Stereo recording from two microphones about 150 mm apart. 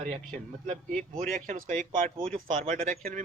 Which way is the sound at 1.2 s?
60° right (ahead or behind).